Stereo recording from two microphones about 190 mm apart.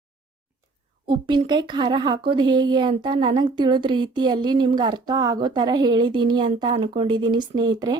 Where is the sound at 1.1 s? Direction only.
25° right (ahead or behind).